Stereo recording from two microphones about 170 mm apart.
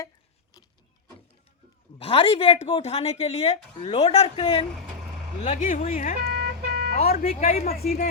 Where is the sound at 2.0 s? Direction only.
35° left (ahead or behind).